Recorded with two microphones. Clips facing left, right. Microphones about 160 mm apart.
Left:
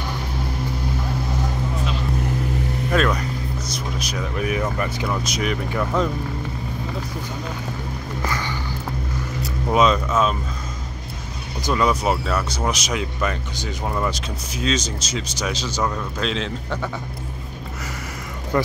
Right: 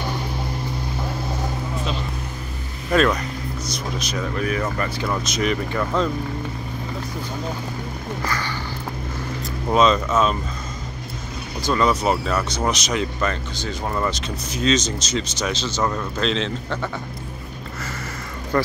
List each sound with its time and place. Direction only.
2.9 s speech: centre (ahead or behind)
4.1 s speech: 15° left (ahead or behind)
5.0 s speech: 5° left (ahead or behind)
8.3 s a sound: 20° left (ahead or behind)
9.7 s a man's voice: 5° left (ahead or behind)
11.6 s a man's voice: 10° left (ahead or behind)
18.5 s speech: 15° left (ahead or behind)